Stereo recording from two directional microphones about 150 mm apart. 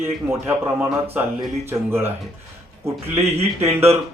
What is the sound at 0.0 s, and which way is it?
A man's voice, 15° right (ahead or behind).